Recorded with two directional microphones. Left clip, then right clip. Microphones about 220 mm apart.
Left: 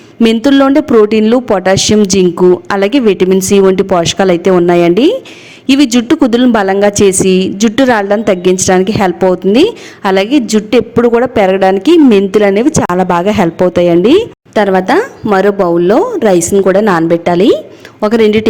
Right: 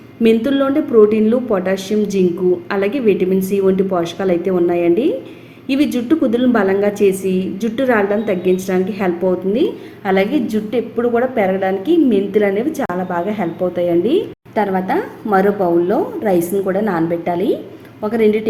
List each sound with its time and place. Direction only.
0.2 s a woman's voice: 45° left (ahead or behind)